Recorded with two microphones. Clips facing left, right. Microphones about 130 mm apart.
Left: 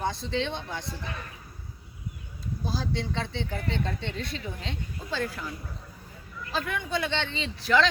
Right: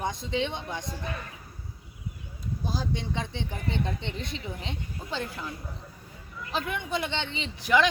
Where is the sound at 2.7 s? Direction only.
15° right (ahead or behind).